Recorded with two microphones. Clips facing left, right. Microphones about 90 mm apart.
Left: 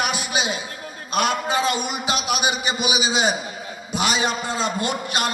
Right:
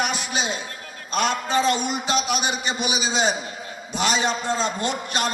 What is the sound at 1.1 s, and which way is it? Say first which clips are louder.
A man's voice: left 1 dB; 10° left (ahead or behind).